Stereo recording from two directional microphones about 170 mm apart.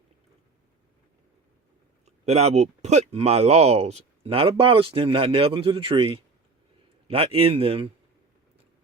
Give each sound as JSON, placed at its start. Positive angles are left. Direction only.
{"t": 2.0, "sound": "speech", "side_deg": -40}